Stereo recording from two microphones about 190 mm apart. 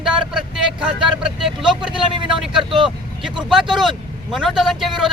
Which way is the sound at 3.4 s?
Centre (ahead or behind).